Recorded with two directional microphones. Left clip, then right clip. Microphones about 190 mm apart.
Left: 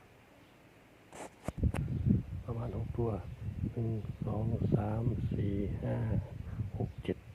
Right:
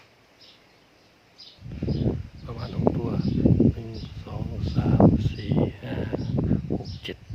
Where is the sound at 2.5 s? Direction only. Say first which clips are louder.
Right 16 dB; 15° right (ahead or behind).